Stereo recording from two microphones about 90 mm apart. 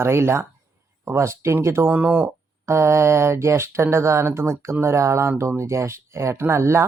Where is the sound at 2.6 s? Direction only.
30° right (ahead or behind).